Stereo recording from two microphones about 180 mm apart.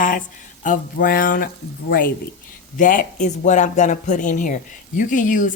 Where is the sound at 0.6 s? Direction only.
50° left (ahead or behind).